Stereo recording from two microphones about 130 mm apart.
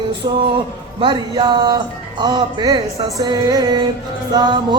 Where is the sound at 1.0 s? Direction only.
35° right (ahead or behind).